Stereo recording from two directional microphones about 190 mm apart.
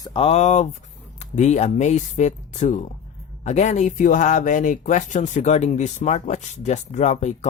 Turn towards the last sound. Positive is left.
turn(degrees=35)  # may be behind; listen again after turning